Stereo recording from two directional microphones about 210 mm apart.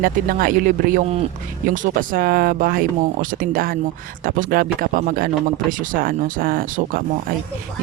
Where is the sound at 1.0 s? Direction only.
30° right (ahead or behind).